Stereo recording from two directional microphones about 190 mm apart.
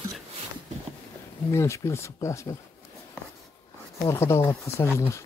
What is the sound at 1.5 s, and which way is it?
Speech, 15° left (ahead or behind).